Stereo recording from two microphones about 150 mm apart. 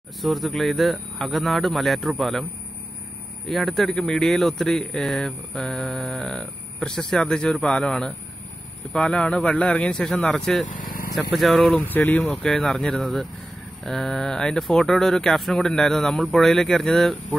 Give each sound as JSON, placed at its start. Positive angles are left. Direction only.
{"t": 0.2, "sound": "speech", "side_deg": 0}
{"t": 3.4, "sound": "a man's voice", "side_deg": 0}
{"t": 10.8, "sound": "vehicle", "side_deg": 70}
{"t": 11.3, "sound": "speech", "side_deg": 0}